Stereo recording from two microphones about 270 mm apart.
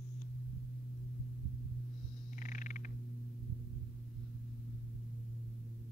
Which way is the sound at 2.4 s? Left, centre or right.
Left.